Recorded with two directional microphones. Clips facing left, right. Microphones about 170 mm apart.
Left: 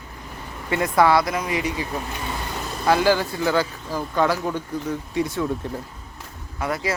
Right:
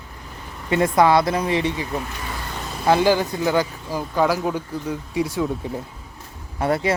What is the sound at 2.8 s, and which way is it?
Speech, 20° right (ahead or behind).